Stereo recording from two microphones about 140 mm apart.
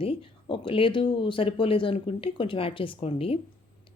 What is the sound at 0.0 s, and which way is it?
Speech, 40° left (ahead or behind).